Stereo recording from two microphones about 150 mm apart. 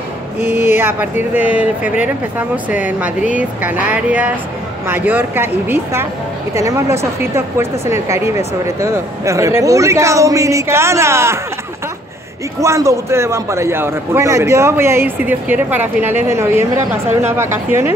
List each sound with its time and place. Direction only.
0.5 s a man's voice: 15° right (ahead or behind)
12.5 s a man's voice: 20° right (ahead or behind)